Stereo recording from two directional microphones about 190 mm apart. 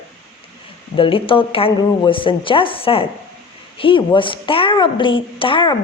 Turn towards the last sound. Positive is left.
turn(degrees=25)  # may be behind; listen again after turning